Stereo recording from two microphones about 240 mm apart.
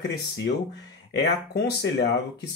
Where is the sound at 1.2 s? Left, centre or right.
Left.